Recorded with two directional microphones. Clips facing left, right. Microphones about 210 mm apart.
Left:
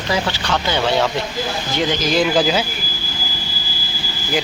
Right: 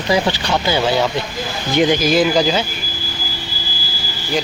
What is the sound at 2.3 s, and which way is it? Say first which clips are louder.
Speech: right 1 dB; 5° left (ahead or behind).